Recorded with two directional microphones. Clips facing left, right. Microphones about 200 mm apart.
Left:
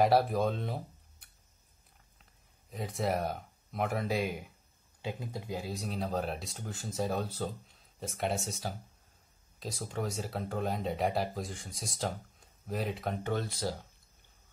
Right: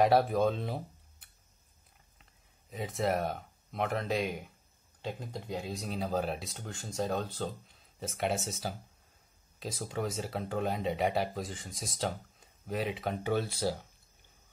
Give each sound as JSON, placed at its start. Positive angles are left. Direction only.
{"t": 0.0, "sound": "speech", "side_deg": 0}
{"t": 2.7, "sound": "speech", "side_deg": 0}